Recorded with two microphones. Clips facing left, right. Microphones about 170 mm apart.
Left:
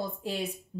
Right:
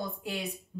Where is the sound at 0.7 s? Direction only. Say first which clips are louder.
Left 3 dB; 30° left (ahead or behind).